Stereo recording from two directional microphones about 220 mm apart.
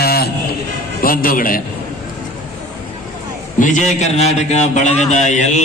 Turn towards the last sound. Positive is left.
turn(degrees=35)  # may be behind; listen again after turning